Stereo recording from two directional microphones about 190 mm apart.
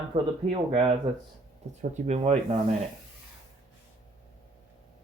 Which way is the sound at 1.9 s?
35° right (ahead or behind).